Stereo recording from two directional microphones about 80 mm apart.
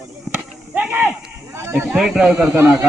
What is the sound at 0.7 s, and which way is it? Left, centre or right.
Speech, right.